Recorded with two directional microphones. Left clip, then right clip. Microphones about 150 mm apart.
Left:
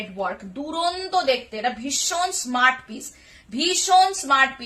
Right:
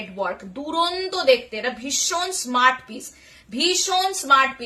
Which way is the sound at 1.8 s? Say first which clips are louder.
Even; 25° right (ahead or behind).